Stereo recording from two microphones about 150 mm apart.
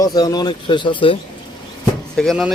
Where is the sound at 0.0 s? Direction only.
25° left (ahead or behind).